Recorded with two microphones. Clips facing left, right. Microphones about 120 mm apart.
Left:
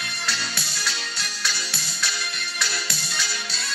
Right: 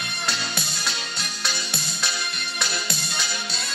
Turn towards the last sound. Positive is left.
turn(degrees=-20)  # may be behind; listen again after turning